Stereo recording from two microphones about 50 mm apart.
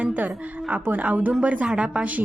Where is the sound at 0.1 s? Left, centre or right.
Right.